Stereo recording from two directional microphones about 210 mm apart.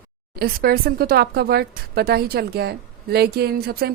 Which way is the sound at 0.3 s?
45° right (ahead or behind).